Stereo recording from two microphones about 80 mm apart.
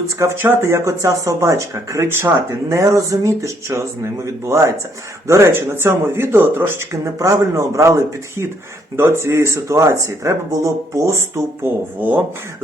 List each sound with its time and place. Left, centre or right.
0.2 s speech: right
11.9 s speech: right